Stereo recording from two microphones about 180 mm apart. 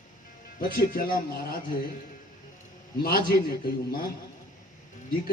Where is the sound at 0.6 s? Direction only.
55° left (ahead or behind).